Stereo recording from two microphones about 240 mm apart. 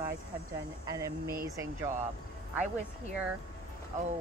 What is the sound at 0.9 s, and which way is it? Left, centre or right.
Speech, centre.